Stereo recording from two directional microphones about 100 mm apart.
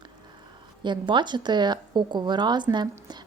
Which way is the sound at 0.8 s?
50° right (ahead or behind).